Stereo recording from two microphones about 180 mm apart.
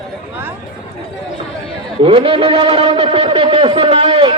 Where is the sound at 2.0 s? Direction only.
30° right (ahead or behind).